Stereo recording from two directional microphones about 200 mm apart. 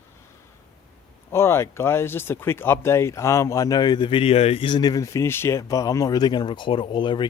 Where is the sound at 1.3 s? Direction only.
10° left (ahead or behind).